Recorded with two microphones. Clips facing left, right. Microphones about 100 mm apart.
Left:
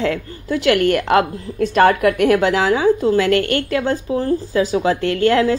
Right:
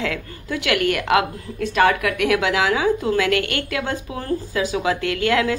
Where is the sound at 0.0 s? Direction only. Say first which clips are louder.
Left 5 dB; 35° left (ahead or behind).